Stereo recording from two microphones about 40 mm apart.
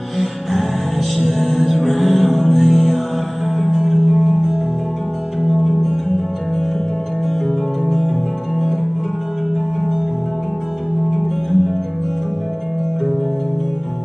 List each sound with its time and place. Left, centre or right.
0.2 s music: centre
2.0 s music: right
2.4 s music: centre
3.8 s music: centre
7.8 s music: centre
11.1 s music: centre